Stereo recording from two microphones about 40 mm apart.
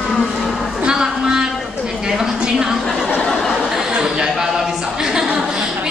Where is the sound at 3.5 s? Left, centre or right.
Centre.